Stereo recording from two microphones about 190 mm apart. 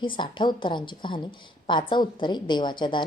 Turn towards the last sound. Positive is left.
turn(degrees=25)  # may be behind; listen again after turning